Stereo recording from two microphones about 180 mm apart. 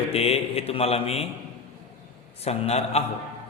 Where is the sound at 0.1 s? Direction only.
35° left (ahead or behind).